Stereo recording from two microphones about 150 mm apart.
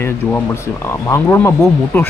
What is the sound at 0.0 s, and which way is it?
Speech, 15° left (ahead or behind).